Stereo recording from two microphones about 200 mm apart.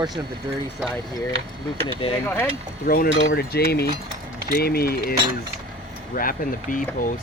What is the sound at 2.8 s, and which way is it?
Cutlery, 45° left (ahead or behind).